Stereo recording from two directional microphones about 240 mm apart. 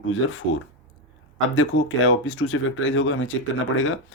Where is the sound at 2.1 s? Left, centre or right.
Left.